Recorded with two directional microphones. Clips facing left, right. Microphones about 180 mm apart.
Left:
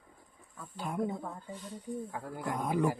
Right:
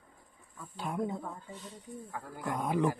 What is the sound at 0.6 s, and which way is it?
Speech, centre (ahead or behind).